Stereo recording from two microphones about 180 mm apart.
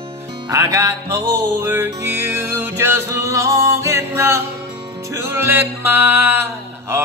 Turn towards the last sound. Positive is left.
turn(degrees=-15)  # may be behind; listen again after turning